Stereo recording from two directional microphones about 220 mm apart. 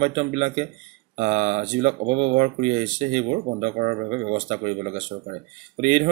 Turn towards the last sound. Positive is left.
turn(degrees=-30)  # may be behind; listen again after turning